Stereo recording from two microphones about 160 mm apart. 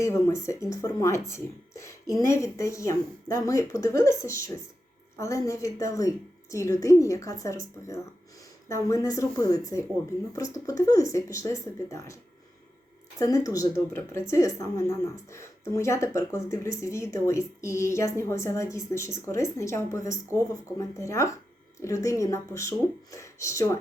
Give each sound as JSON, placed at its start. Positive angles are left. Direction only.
{"t": 0.0, "sound": "a woman's voice", "side_deg": 20}
{"t": 13.1, "sound": "a woman's voice", "side_deg": 20}